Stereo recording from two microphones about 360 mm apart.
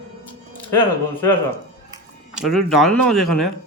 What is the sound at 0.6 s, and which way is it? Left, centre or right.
Speech, centre.